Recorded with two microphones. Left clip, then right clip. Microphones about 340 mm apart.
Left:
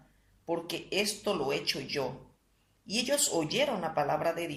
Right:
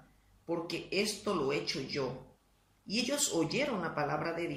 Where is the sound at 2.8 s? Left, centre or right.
Centre.